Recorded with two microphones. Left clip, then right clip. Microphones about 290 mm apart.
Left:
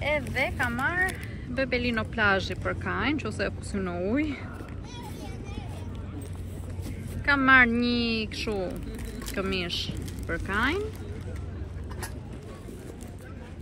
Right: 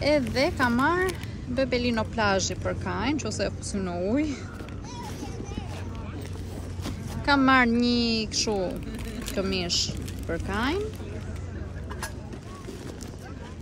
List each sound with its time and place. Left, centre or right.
0.0 s speech: centre
7.2 s speech: centre